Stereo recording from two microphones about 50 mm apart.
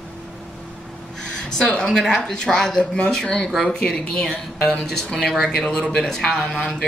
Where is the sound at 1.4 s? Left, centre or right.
Centre.